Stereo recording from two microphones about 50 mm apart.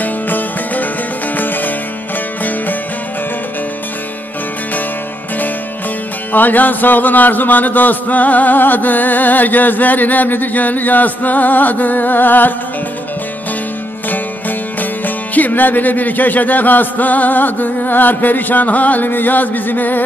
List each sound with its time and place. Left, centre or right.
0.0 s music: left
6.3 s music: left
14.8 s music: left